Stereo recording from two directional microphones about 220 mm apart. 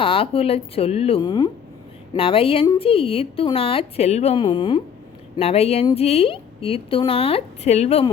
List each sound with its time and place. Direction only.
0.0 s a woman's voice: 25° left (ahead or behind)